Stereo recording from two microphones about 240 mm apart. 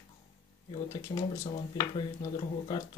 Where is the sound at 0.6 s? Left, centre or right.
Centre.